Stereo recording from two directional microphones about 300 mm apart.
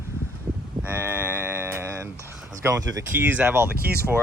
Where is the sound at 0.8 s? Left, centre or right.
Centre.